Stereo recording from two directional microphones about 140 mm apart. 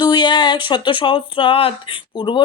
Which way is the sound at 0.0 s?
35° left (ahead or behind).